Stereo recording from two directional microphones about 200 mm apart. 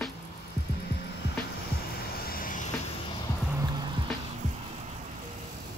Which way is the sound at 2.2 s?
45° left (ahead or behind).